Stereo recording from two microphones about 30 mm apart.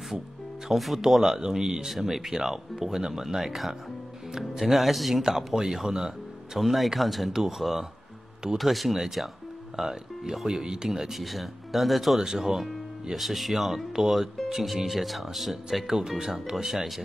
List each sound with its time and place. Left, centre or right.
0.7 s speech: centre
0.9 s speech: centre
1.9 s speech: centre
4.6 s speech: centre
5.2 s speech: centre
6.6 s speech: centre
10.4 s speech: right
10.9 s speech: centre
12.2 s speech: centre
15.9 s speech: centre